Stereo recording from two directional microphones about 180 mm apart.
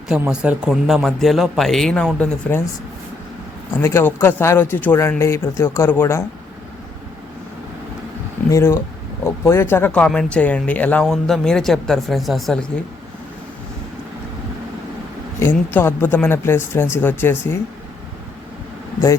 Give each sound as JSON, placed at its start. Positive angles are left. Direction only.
{"t": 0.1, "sound": "a man's voice", "side_deg": -5}
{"t": 3.8, "sound": "speech", "side_deg": 15}
{"t": 8.4, "sound": "speech", "side_deg": 15}
{"t": 15.4, "sound": "speech", "side_deg": 15}